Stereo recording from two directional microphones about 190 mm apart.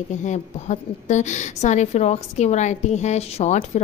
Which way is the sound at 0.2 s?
40° left (ahead or behind).